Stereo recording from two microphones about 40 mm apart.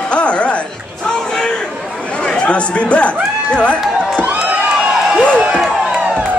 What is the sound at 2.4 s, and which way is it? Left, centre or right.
Speech, left.